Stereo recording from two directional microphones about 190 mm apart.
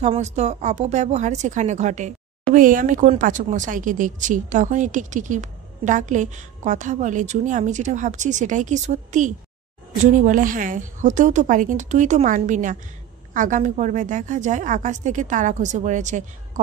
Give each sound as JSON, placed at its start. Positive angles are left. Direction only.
{"t": 0.0, "sound": "speech", "side_deg": -35}